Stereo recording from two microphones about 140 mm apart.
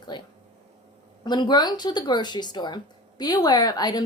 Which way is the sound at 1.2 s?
30° left (ahead or behind).